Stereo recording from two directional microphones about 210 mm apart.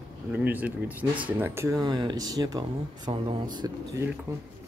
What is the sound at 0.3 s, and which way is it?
Speech, 5° right (ahead or behind).